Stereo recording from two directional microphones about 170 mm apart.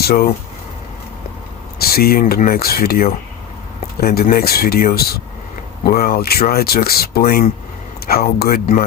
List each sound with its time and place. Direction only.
0.0 s speech: 65° left (ahead or behind)
1.8 s speech: 65° left (ahead or behind)